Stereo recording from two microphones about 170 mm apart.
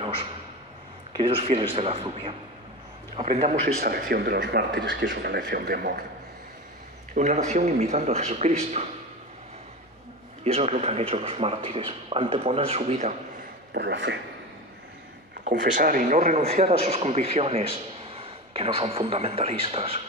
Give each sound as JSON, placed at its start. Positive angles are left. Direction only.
{"t": 1.1, "sound": "speech", "side_deg": -30}
{"t": 3.6, "sound": "speech", "side_deg": -65}
{"t": 7.2, "sound": "speech", "side_deg": -45}
{"t": 10.4, "sound": "speech", "side_deg": -40}
{"t": 13.7, "sound": "speech", "side_deg": -85}
{"t": 15.7, "sound": "speech", "side_deg": -55}